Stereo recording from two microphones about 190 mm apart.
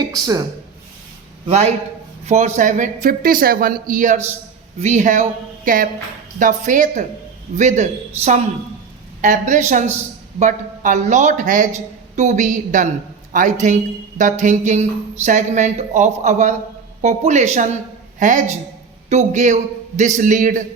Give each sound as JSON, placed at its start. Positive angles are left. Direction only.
{"t": 0.0, "sound": "speech", "side_deg": -20}
{"t": 1.5, "sound": "a woman's voice", "side_deg": -35}